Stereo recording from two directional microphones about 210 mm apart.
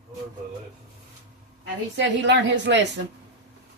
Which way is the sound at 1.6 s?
60° right (ahead or behind).